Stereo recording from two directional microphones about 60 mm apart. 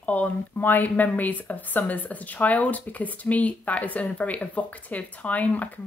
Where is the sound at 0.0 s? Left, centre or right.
Left.